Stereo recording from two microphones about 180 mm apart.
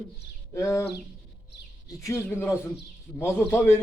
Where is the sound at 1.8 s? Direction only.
15° left (ahead or behind).